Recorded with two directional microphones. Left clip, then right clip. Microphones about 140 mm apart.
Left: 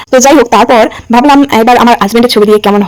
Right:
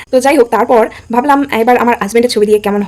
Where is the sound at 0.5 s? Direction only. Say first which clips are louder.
Left 5 dB; 50° left (ahead or behind).